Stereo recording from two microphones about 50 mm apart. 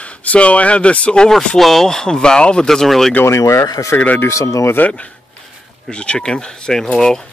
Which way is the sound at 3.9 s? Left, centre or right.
Left.